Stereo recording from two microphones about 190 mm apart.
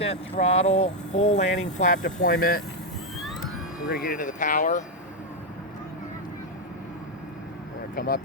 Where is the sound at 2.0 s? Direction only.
65° left (ahead or behind).